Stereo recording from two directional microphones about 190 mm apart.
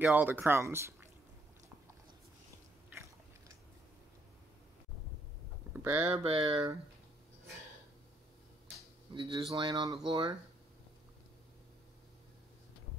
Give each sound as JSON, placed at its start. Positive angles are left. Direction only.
{"t": 0.0, "sound": "speech", "side_deg": -10}
{"t": 2.9, "sound": "biting", "side_deg": -15}
{"t": 5.7, "sound": "a sound", "side_deg": -10}
{"t": 6.1, "sound": "speech", "side_deg": -30}
{"t": 9.1, "sound": "speech", "side_deg": -25}